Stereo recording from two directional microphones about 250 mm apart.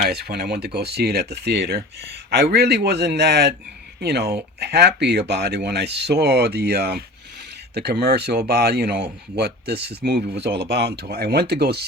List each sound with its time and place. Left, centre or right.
0.0 s speech: right